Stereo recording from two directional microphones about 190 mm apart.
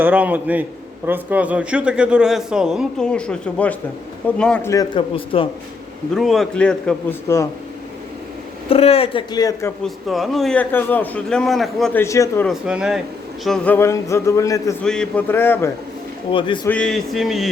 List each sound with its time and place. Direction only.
0.0 s a man's voice: 5° right (ahead or behind)
4.7 s speech: 25° left (ahead or behind)
6.1 s a man's voice: centre (ahead or behind)
8.7 s speech: 30° left (ahead or behind)
9.8 s a man's voice: centre (ahead or behind)
12.0 s a man's voice: 15° left (ahead or behind)
12.5 s a man's voice: 5° right (ahead or behind); by 15.7 s 10° left (ahead or behind)
16.3 s speech: 25° left (ahead or behind)
16.6 s a man's voice: 5° left (ahead or behind)